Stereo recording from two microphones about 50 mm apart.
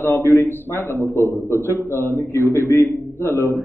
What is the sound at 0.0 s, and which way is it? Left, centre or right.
A man's voice, left.